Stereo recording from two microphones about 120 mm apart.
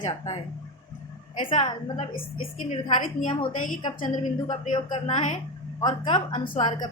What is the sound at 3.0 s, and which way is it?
Speech, 90° left.